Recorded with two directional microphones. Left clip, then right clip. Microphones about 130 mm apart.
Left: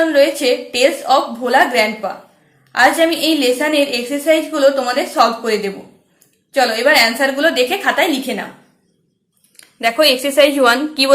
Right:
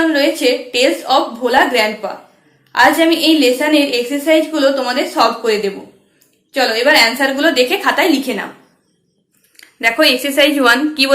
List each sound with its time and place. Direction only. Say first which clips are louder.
0.1 s a woman's voice: left 1 dB; 35° left (ahead or behind)
9.6 s a sound: right 1 dB; 35° left (ahead or behind)
10.2 s a woman's voice: even; 40° left (ahead or behind)